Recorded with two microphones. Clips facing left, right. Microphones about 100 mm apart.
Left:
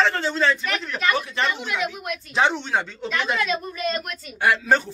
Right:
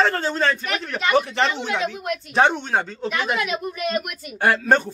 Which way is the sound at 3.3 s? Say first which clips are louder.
Even; 15° right (ahead or behind).